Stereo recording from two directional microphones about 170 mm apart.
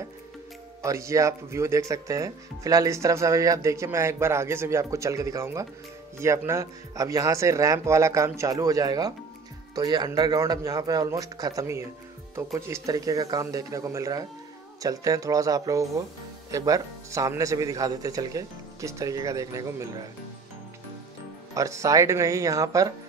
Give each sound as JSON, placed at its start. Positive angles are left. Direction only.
{"t": 0.8, "sound": "speech", "side_deg": -15}
{"t": 21.5, "sound": "speech", "side_deg": -20}